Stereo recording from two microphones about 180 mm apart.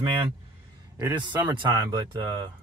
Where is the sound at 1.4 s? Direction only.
25° right (ahead or behind).